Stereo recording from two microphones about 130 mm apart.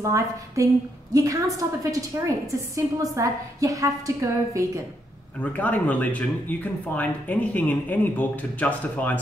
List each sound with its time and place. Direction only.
0.0 s a woman's voice: 25° right (ahead or behind)
5.4 s speech: 10° left (ahead or behind)